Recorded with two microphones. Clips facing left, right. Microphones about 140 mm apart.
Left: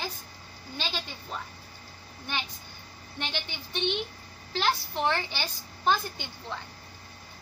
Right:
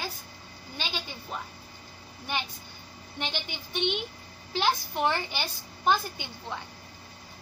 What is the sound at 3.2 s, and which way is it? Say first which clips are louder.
A woman's voice: right 1 dB; 15° right (ahead or behind).